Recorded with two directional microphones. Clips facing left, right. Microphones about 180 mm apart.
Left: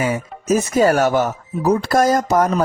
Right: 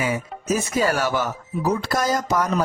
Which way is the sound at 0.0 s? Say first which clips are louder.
Left 4 dB; 45° left (ahead or behind).